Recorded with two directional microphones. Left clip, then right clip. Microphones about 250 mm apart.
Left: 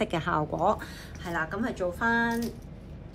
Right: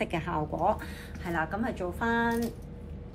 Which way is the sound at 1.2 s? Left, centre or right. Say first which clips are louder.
Even; centre.